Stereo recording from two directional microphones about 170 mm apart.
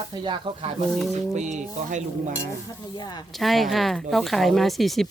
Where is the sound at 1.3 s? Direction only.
45° right (ahead or behind).